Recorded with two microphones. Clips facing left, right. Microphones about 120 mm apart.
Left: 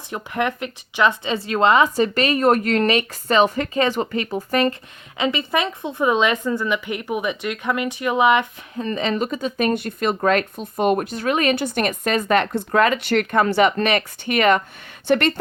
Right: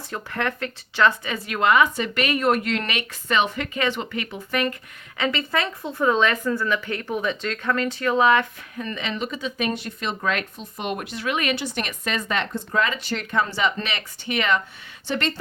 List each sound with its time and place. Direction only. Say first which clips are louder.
0.1 s speech: left 4 dB; 15° left (ahead or behind); by 4.7 s 35° left (ahead or behind)
5.1 s a woman's voice: left 3 dB; 20° left (ahead or behind)
8.7 s a woman's voice: left 7 dB; 35° left (ahead or behind); by 15.4 s 55° left (ahead or behind)